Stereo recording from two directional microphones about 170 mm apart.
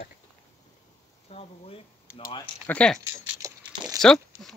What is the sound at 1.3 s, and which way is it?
Speech, 35° left (ahead or behind).